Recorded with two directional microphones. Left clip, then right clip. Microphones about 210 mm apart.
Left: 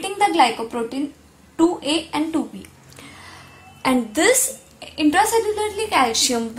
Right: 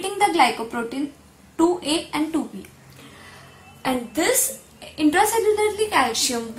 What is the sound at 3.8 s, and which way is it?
Speech, 45° left (ahead or behind).